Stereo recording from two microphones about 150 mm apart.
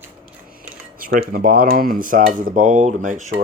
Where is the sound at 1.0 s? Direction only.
70° right (ahead or behind).